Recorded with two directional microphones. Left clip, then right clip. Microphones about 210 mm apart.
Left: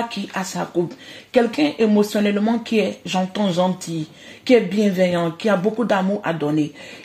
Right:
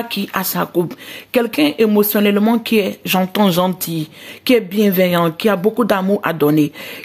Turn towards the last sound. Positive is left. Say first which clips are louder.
# right 7 dB
turn(degrees=-45)  # may be behind; listen again after turning